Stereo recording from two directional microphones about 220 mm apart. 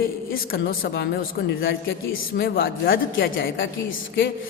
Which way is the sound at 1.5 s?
55° left (ahead or behind).